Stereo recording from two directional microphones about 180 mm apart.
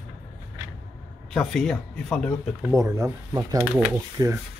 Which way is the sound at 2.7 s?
15° right (ahead or behind).